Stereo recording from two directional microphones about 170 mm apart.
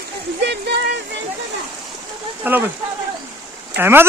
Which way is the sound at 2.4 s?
10° right (ahead or behind).